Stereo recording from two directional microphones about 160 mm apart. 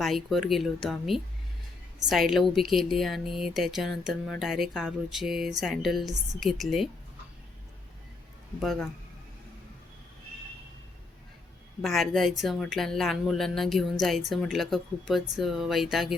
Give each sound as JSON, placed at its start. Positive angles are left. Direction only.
{"t": 0.0, "sound": "speech", "side_deg": 0}
{"t": 8.6, "sound": "speech", "side_deg": 0}
{"t": 11.8, "sound": "speech", "side_deg": 0}